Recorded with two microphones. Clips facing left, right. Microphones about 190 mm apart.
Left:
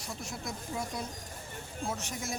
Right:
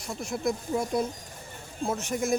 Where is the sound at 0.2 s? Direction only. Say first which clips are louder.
Right 11 dB; 50° right (ahead or behind).